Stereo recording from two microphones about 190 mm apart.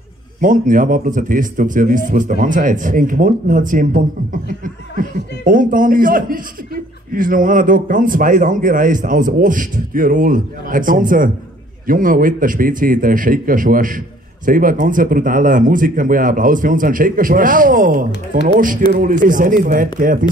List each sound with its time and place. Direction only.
0.4 s a man's voice: 45° right (ahead or behind)